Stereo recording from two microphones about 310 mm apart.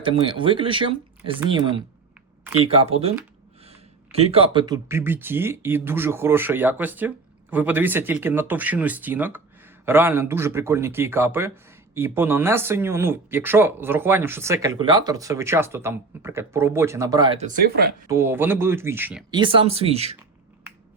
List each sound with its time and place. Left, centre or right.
0.0 s speech: centre
2.8 s speech: centre